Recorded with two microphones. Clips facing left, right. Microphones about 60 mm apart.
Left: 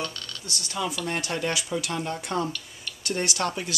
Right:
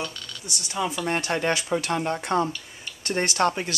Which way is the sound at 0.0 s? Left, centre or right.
Centre.